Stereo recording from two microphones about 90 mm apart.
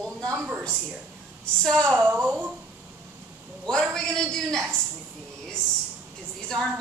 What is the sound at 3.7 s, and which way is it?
Speech, 5° left (ahead or behind).